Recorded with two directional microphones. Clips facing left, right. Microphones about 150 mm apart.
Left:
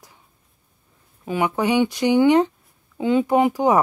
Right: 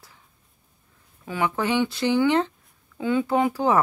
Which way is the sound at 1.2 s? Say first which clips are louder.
Left 4 dB; 20° left (ahead or behind).